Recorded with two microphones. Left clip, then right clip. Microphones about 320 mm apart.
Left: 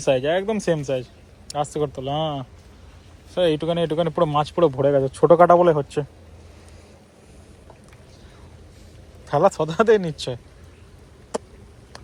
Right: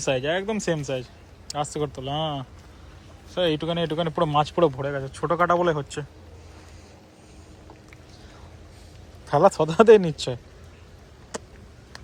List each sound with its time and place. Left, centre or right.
0.0 s speech: centre
4.8 s speech: centre
9.2 s speech: centre
11.3 s a sound: centre